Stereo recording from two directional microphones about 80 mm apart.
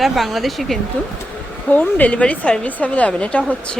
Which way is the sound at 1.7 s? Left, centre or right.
Centre.